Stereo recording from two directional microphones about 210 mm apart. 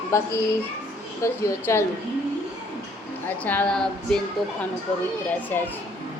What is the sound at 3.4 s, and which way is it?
Speech, 5° left (ahead or behind).